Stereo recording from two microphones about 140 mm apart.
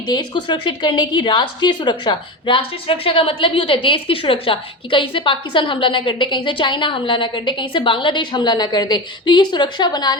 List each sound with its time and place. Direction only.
0.1 s a woman's voice: 30° left (ahead or behind)